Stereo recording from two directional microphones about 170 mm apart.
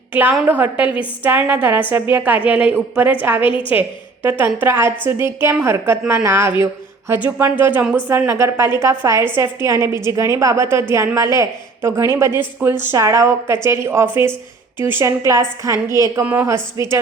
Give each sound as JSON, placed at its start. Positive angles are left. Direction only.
{"t": 0.1, "sound": "a woman's voice", "side_deg": -10}